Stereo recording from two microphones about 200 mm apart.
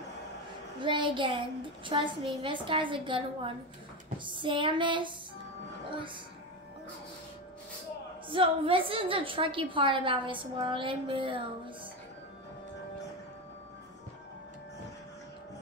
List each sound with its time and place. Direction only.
0.7 s a woman's voice: 25° right (ahead or behind)
8.3 s a woman's voice: 25° right (ahead or behind)